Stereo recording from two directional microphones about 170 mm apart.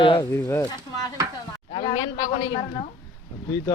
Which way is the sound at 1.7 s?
25° left (ahead or behind).